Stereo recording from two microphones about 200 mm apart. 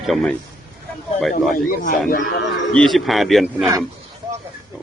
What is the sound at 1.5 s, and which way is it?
Speech, 45° left (ahead or behind).